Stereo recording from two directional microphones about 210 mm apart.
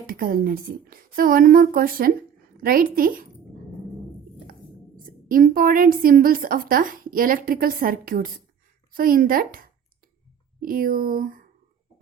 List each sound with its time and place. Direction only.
0.1 s a woman's voice: 45° right (ahead or behind)
4.9 s a woman's voice: 40° right (ahead or behind)